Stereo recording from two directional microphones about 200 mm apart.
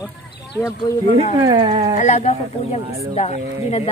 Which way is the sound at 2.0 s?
35° left (ahead or behind).